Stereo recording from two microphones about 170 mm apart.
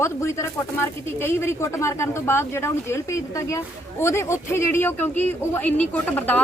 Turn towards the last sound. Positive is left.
turn(degrees=10)  # may be behind; listen again after turning